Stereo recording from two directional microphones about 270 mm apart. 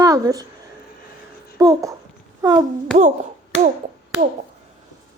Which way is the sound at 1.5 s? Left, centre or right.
Centre.